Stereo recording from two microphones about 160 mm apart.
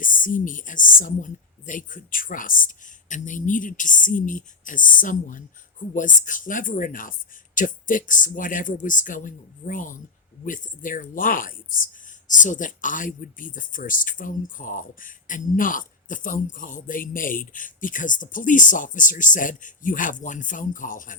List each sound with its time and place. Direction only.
0.0 s speech: 55° left (ahead or behind)